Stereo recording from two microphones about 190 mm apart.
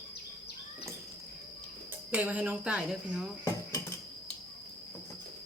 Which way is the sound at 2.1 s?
10° right (ahead or behind).